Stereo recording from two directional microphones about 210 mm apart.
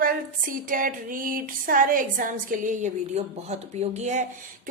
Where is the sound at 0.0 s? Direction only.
40° right (ahead or behind).